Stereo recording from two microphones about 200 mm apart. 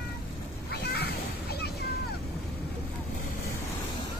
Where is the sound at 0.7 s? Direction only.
55° left (ahead or behind).